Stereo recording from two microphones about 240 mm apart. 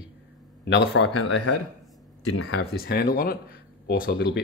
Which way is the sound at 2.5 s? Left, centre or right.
Left.